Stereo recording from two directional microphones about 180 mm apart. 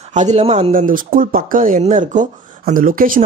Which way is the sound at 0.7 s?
50° right (ahead or behind).